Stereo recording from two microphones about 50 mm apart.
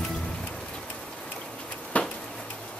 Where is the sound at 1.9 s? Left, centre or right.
Left.